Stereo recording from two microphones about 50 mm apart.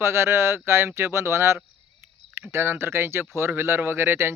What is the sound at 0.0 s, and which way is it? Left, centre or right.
Speech, right.